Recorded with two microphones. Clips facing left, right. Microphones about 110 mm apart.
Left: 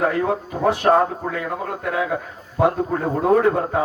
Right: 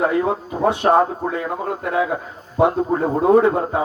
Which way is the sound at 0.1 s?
25° right (ahead or behind).